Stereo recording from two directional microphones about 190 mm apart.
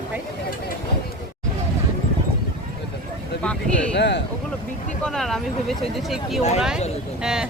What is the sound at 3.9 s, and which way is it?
Speech, 65° left (ahead or behind).